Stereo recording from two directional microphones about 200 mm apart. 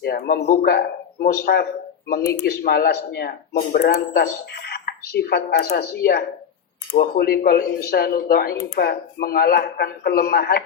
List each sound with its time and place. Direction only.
0.0 s speech: 50° left (ahead or behind)